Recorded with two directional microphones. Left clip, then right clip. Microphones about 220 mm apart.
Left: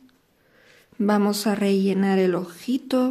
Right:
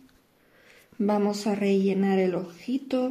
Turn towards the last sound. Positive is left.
turn(degrees=20)  # may be behind; listen again after turning